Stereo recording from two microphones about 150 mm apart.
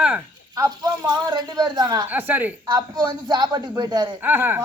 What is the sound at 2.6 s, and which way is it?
A man's voice, 30° right (ahead or behind).